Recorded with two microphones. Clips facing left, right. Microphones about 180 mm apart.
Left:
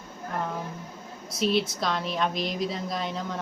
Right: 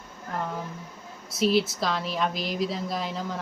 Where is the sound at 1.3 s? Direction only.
Centre (ahead or behind).